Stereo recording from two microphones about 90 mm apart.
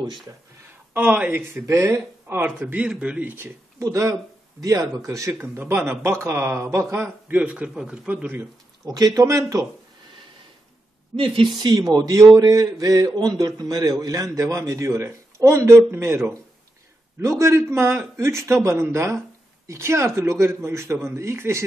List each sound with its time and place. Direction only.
0.9 s a man's voice: 15° right (ahead or behind)
1.5 s speech: 30° right (ahead or behind)
7.2 s a man's voice: 15° right (ahead or behind)
8.8 s speech: 40° right (ahead or behind)
11.1 s speech: 80° right
11.5 s speech: 45° right (ahead or behind); by 21.6 s 30° right (ahead or behind)